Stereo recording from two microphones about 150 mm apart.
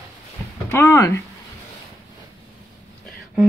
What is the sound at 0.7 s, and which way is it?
Speech, 15° left (ahead or behind).